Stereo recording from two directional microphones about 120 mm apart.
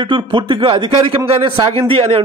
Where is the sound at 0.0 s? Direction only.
45° right (ahead or behind).